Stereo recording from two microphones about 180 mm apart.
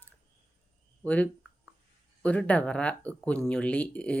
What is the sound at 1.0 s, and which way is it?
Speech, 10° left (ahead or behind).